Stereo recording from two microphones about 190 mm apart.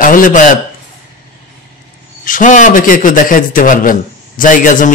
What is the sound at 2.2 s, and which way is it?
A man's voice, 45° left (ahead or behind).